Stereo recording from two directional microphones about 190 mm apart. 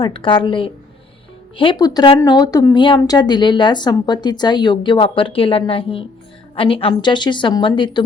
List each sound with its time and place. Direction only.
0.0 s speech: 25° left (ahead or behind)